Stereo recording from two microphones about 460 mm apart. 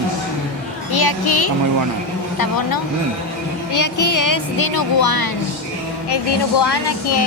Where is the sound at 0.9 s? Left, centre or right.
Left.